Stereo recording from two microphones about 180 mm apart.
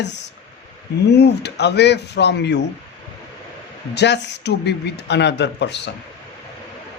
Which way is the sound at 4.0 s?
70° left (ahead or behind).